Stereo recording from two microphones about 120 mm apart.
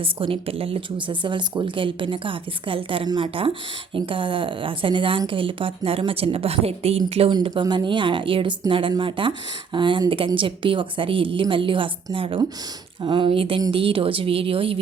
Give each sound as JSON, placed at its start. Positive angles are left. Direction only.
{"t": 0.0, "sound": "a woman's voice", "side_deg": -50}
{"t": 7.3, "sound": "a woman's voice", "side_deg": -40}